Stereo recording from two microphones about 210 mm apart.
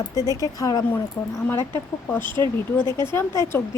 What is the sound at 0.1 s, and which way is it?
Speech, 15° left (ahead or behind).